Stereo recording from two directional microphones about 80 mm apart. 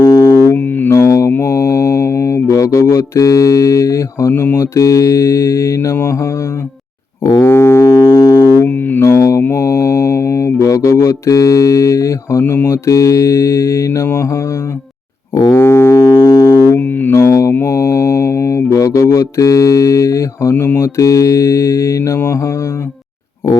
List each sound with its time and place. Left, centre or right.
0.0 s music: left
0.5 s music: left
0.9 s mantra: left
7.4 s didgeridoo: left
8.2 s music: left
8.6 s music: left
9.0 s mantra: left
15.5 s music: left
16.7 s music: left
17.2 s mantra: left